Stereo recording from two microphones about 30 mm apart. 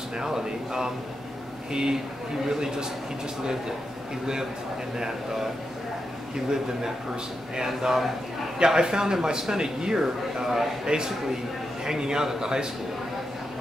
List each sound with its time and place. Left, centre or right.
0.2 s speech: right
4.9 s a man's voice: centre
7.5 s speech: centre
10.9 s speech: right
11.8 s speech: right